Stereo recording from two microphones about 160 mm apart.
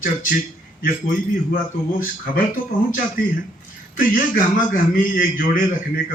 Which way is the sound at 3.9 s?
55° left (ahead or behind).